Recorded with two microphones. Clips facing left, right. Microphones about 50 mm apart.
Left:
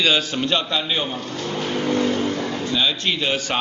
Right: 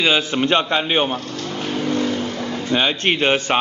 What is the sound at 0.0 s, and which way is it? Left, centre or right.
Speech, right.